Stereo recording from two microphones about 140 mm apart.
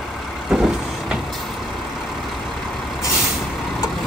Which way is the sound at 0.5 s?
5° right (ahead or behind).